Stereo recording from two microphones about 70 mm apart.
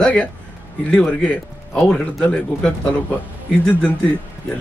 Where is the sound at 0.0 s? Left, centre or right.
Centre.